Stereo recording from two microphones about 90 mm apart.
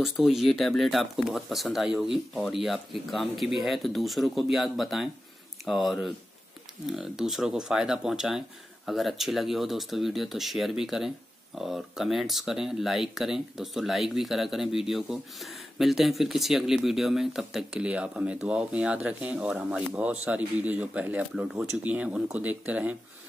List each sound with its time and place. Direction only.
0.0 s speech: centre (ahead or behind)